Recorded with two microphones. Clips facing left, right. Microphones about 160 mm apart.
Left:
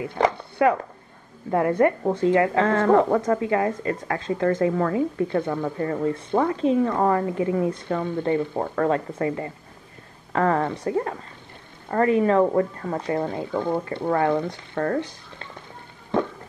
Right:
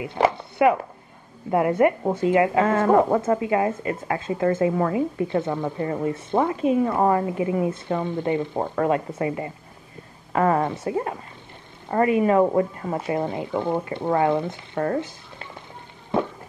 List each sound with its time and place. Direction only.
0.2 s a woman's voice: 20° right (ahead or behind)